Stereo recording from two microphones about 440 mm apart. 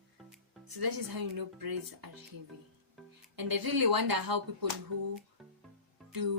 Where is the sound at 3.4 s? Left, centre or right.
Right.